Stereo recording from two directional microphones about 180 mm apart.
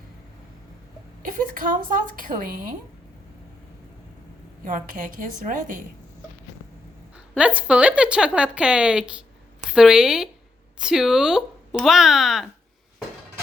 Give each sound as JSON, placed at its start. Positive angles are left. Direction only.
{"t": 1.2, "sound": "a woman's voice", "side_deg": -50}
{"t": 4.6, "sound": "a woman's voice", "side_deg": -45}
{"t": 7.3, "sound": "a woman's voice", "side_deg": -5}